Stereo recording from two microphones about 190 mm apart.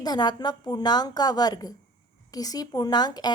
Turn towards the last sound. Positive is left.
turn(degrees=20)  # may be behind; listen again after turning